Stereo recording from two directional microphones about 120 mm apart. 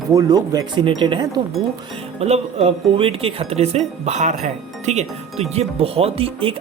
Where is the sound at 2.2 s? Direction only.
60° right (ahead or behind).